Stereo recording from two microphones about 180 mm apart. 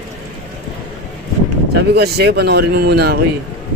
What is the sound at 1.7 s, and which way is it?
A man's voice, 65° right (ahead or behind).